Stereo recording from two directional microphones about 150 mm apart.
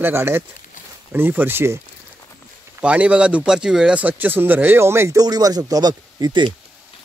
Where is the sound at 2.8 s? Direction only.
10° right (ahead or behind); by 6.5 s 30° right (ahead or behind).